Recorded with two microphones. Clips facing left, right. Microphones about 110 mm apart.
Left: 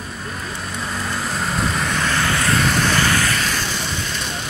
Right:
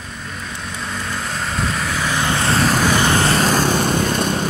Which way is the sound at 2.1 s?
20° right (ahead or behind).